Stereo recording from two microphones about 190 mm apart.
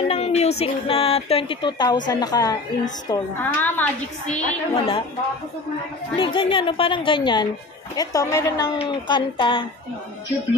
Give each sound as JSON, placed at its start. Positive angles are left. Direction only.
{"t": 0.1, "sound": "a woman's voice", "side_deg": 35}
{"t": 4.4, "sound": "speech", "side_deg": 30}
{"t": 6.1, "sound": "speech", "side_deg": 25}